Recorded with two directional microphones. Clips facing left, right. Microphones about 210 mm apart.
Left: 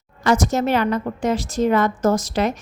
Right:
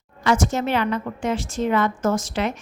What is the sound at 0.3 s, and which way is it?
A woman's voice, 40° left (ahead or behind).